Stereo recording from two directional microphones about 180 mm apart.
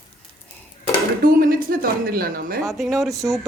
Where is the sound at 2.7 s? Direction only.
Centre (ahead or behind).